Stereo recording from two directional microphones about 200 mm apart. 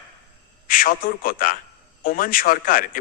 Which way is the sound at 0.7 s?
45° left (ahead or behind).